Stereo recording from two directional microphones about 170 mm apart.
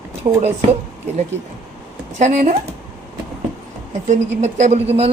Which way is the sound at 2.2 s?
45° right (ahead or behind).